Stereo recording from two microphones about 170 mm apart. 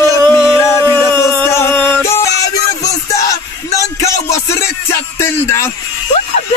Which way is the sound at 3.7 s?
20° left (ahead or behind).